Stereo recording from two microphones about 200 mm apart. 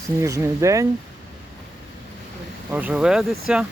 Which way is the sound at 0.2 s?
15° right (ahead or behind).